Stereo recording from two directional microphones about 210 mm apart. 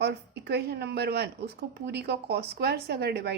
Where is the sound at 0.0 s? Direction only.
50° right (ahead or behind).